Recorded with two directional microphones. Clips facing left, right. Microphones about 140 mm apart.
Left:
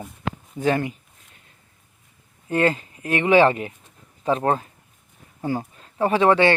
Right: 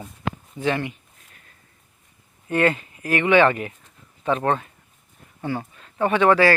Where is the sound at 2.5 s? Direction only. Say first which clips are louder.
Even; 30° left (ahead or behind).